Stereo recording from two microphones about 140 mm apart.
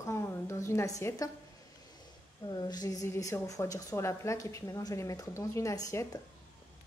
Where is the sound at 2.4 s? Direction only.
30° left (ahead or behind).